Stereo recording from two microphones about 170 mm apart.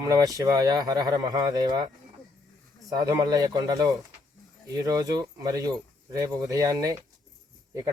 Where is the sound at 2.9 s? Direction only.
20° right (ahead or behind).